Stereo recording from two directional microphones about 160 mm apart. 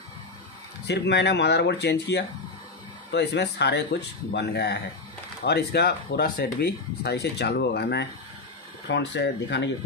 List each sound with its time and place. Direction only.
0.8 s speech: 90° left